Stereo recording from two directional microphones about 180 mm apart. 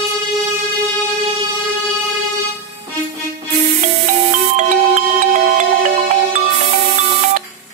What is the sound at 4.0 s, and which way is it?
Music, 45° right (ahead or behind).